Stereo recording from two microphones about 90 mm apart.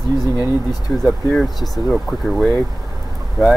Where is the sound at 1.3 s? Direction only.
5° left (ahead or behind).